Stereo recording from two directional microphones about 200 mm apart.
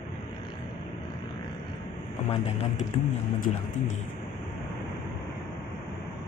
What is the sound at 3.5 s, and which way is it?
Speech, 40° left (ahead or behind).